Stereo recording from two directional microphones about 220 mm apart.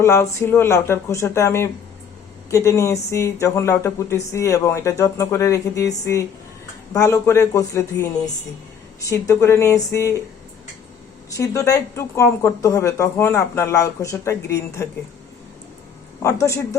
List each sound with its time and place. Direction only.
0.0 s speech: 10° left (ahead or behind)
11.3 s speech: 15° left (ahead or behind)
16.2 s speech: 15° left (ahead or behind)